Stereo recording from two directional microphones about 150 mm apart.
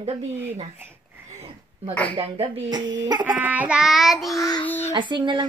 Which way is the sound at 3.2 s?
10° right (ahead or behind).